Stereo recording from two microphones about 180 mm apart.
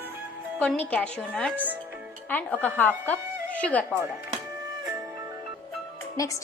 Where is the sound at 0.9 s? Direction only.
5° left (ahead or behind).